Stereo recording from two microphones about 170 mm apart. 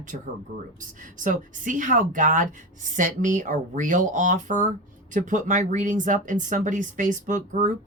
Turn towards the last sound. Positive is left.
turn(degrees=-50)  # may be behind; listen again after turning